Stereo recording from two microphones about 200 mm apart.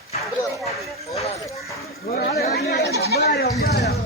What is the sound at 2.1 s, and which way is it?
Chatter, 50° left (ahead or behind).